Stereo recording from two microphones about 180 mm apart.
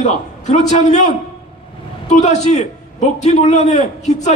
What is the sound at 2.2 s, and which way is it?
A man's voice, 40° left (ahead or behind).